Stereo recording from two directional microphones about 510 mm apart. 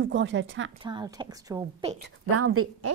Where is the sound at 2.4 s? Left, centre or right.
Right.